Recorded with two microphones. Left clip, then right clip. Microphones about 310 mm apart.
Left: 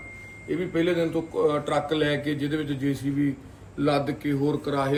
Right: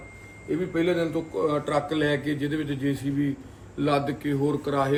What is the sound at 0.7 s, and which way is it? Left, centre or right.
A man's voice, left.